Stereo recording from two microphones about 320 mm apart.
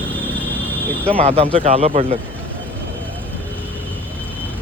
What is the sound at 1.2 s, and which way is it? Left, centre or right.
Speech, centre.